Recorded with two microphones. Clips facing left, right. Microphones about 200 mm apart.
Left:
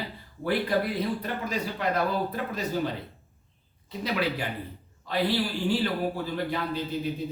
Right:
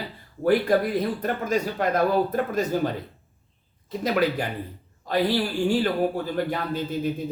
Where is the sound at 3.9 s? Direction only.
45° right (ahead or behind).